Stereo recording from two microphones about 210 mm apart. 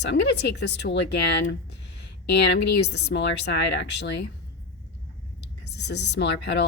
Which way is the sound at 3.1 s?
55° left (ahead or behind).